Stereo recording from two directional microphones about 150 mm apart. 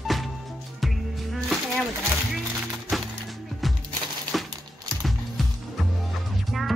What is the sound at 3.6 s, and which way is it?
Music, centre (ahead or behind).